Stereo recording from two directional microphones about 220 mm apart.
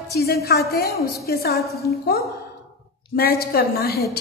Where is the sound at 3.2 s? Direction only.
45° left (ahead or behind).